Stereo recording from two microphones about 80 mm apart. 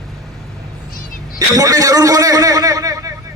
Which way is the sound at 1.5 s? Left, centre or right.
Right.